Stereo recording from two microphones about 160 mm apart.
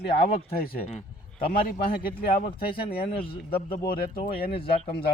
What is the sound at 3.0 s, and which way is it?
A man's voice, 35° left (ahead or behind).